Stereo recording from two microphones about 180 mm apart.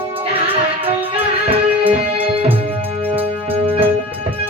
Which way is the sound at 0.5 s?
30° right (ahead or behind).